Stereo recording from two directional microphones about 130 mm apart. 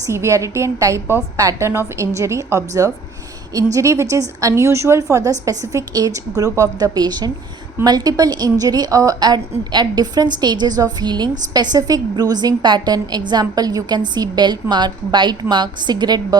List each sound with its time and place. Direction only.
0.0 s a woman's voice: 20° right (ahead or behind)